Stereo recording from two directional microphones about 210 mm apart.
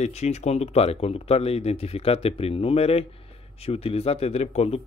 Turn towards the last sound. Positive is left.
turn(degrees=30)  # may be behind; listen again after turning